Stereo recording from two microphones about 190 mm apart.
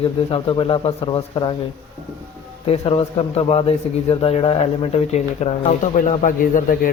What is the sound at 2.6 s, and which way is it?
A man's voice, 30° left (ahead or behind).